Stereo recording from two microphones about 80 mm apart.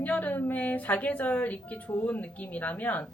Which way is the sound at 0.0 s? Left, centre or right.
Left.